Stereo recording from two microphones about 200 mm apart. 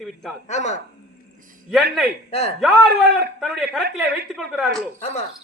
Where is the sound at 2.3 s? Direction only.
30° left (ahead or behind).